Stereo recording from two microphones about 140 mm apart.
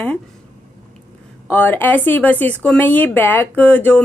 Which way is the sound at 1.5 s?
15° left (ahead or behind).